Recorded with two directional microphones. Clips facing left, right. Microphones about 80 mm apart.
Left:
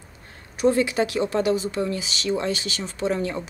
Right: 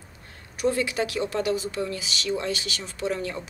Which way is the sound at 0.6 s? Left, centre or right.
Left.